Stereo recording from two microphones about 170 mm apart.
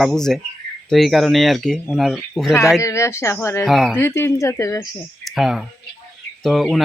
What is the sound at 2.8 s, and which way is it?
Speech, 15° left (ahead or behind).